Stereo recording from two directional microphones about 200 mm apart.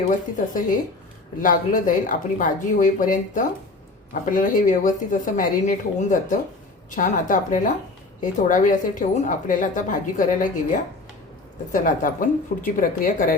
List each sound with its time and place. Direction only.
0.1 s a woman's voice: 40° left (ahead or behind)
11.7 s speech: 40° left (ahead or behind)